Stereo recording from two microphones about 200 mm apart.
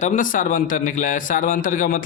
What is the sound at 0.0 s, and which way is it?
A man's voice, 40° left (ahead or behind).